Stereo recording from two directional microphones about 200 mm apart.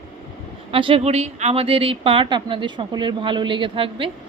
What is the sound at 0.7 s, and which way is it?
A woman's voice, 25° right (ahead or behind).